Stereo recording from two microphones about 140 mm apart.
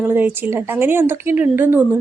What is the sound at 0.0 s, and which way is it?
A woman's voice, 15° right (ahead or behind).